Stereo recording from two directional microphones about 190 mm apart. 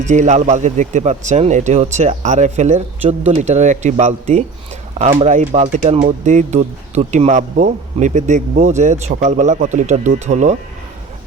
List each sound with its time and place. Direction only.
0.0 s speech: 40° right (ahead or behind)